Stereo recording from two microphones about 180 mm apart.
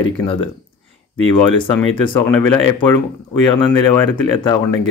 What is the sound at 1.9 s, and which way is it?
Speech, 25° left (ahead or behind).